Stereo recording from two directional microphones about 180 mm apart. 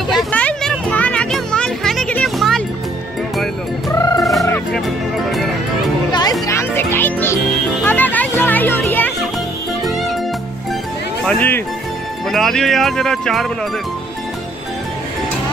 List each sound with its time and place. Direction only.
0.1 s music: 5° left (ahead or behind)
3.9 s music: 20° left (ahead or behind)
4.2 s music: centre (ahead or behind)
6.4 s music: 15° left (ahead or behind)
11.2 s music: 10° left (ahead or behind)
12.3 s speech: centre (ahead or behind)